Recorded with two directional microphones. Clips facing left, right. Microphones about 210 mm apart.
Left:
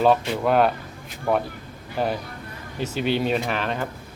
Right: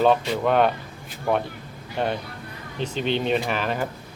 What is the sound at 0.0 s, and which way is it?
Speech, 5° left (ahead or behind).